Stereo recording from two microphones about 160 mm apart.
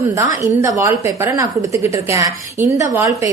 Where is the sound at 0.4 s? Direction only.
20° right (ahead or behind).